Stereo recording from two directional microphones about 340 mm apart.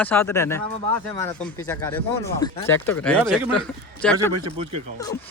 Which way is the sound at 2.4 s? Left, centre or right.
Centre.